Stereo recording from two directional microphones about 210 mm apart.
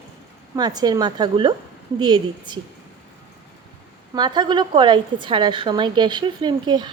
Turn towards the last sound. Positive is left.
turn(degrees=-20)  # may be behind; listen again after turning